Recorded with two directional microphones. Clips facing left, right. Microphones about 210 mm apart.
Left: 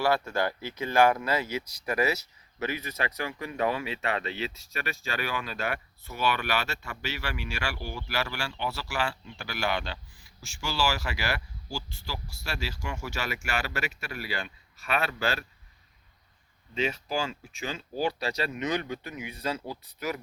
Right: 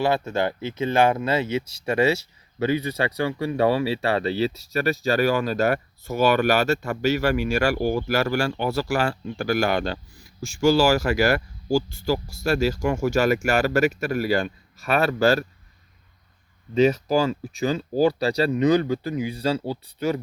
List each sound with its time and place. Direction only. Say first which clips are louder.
0.0 s speech: right 4 dB; 20° right (ahead or behind); by 15.4 s 40° right (ahead or behind)
16.7 s speech: right 11 dB; 40° right (ahead or behind)